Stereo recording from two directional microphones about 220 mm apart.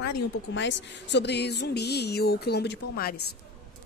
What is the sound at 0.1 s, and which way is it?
A woman's voice, 55° left (ahead or behind).